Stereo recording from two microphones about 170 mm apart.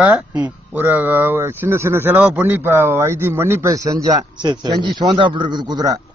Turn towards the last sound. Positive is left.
turn(degrees=-20)  # may be behind; listen again after turning